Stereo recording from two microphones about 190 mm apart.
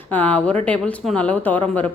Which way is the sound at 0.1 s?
10° left (ahead or behind).